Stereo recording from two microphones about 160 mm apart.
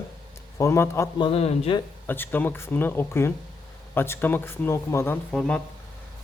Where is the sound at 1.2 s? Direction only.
40° left (ahead or behind).